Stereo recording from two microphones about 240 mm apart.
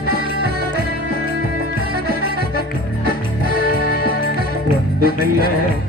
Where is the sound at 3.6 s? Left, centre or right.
Left.